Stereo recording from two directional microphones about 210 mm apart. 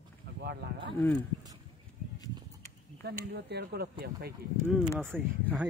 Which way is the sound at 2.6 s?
50° right (ahead or behind).